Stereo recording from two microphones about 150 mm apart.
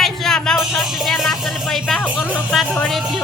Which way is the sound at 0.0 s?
5° left (ahead or behind).